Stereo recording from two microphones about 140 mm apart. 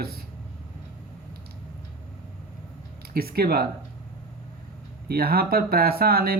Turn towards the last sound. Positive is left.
turn(degrees=-90)